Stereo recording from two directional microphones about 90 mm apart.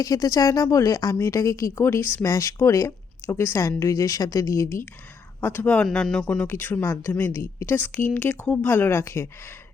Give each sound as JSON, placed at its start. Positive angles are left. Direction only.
{"t": 0.0, "sound": "speech", "side_deg": 40}
{"t": 5.4, "sound": "a woman's voice", "side_deg": 20}
{"t": 5.8, "sound": "speech", "side_deg": 5}
{"t": 6.5, "sound": "a woman's voice", "side_deg": 20}